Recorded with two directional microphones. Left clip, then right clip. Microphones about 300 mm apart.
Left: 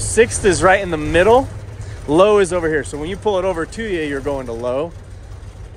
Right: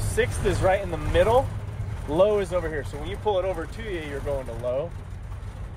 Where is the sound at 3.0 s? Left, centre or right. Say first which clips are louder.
Left 4 dB; left.